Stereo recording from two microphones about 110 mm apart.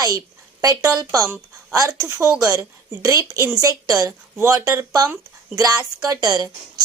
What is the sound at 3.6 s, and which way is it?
A woman's voice, 30° right (ahead or behind).